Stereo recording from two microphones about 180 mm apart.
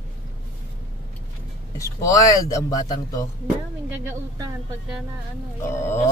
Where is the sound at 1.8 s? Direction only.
20° left (ahead or behind).